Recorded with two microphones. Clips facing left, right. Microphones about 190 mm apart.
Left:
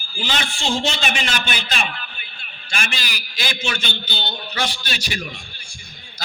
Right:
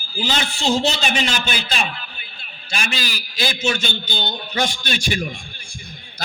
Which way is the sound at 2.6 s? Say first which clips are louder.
Right 2 dB; 45° right (ahead or behind).